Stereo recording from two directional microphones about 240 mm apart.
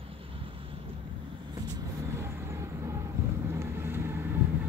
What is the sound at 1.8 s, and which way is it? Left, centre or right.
Vehicle, centre.